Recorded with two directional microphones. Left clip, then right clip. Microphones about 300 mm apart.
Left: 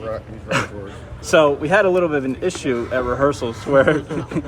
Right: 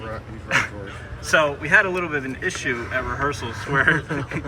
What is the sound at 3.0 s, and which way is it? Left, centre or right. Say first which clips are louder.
Speech: left 6 dB; centre.